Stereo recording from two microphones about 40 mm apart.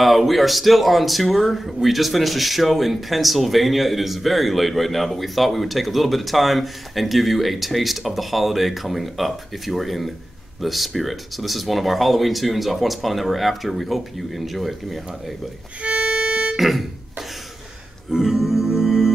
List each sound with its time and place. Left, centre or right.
0.0 s speech: centre
15.8 s music: right
16.5 s a sound: centre
18.1 s music: centre